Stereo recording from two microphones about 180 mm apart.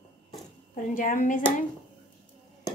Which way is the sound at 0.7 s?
50° left (ahead or behind).